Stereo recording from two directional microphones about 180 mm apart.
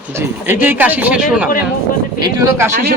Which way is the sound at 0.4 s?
10° right (ahead or behind).